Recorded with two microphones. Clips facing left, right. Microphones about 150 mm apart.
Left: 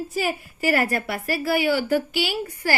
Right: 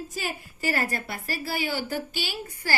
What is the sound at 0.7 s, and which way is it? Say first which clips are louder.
Speech: left 7 dB; 65° left (ahead or behind).